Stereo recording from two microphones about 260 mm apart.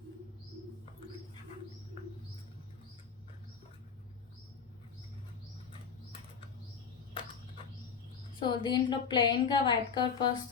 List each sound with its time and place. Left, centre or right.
8.4 s a woman's voice: centre